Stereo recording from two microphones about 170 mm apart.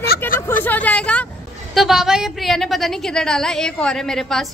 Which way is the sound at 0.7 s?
10° left (ahead or behind).